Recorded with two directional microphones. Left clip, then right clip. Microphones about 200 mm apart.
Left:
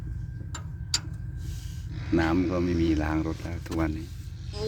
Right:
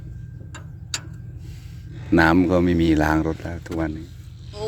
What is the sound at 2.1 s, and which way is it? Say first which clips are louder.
Speech: right 9 dB; 40° right (ahead or behind).